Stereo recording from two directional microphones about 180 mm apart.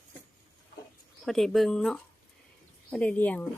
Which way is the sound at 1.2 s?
Centre (ahead or behind).